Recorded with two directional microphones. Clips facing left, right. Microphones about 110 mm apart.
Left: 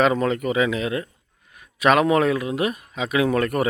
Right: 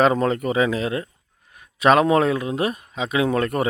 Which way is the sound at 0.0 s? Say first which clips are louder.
Right 1 dB; 35° right (ahead or behind).